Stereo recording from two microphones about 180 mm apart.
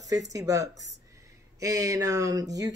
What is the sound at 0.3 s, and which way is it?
Speech, 20° right (ahead or behind).